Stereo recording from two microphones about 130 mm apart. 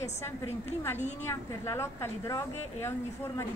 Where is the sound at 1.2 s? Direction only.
20° left (ahead or behind).